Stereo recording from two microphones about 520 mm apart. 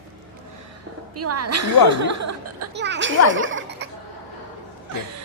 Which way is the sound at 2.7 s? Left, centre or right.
Centre.